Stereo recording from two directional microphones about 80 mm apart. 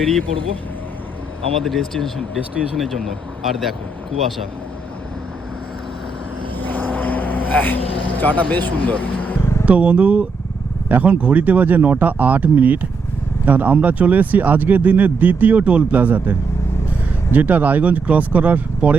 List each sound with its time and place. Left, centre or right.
1.6 s speech: centre
6.6 s vehicle: left
9.6 s speech: centre
17.3 s speech: right